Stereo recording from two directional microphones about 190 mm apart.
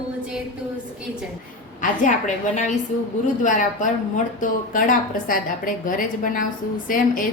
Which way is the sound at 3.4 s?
40° left (ahead or behind).